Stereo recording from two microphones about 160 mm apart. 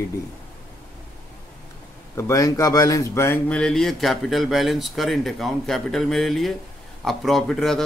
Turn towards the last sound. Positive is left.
turn(degrees=0)  # may be behind; listen again after turning